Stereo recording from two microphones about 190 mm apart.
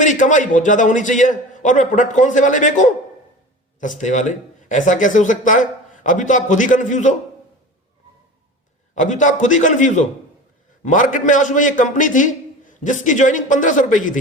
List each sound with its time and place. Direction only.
0.0 s a man's voice: 40° left (ahead or behind)
9.0 s a man's voice: 40° left (ahead or behind)